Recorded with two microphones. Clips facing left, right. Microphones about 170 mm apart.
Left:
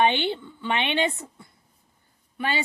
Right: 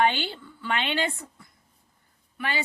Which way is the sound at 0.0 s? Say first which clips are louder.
Left 2 dB; 20° left (ahead or behind).